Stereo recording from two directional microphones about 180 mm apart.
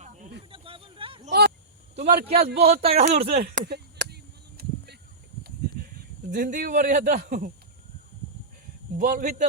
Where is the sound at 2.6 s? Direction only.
35° right (ahead or behind).